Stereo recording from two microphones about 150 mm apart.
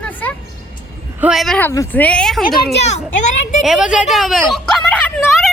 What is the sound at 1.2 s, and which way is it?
Speech, centre (ahead or behind).